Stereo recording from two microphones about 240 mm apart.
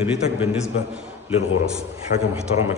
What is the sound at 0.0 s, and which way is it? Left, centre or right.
Speech, centre.